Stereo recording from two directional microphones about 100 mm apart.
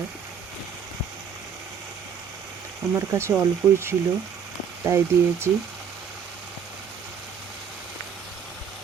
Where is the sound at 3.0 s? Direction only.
30° right (ahead or behind).